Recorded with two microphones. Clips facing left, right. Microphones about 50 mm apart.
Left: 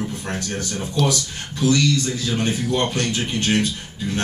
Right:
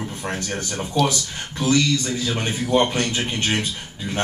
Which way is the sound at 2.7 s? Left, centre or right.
Right.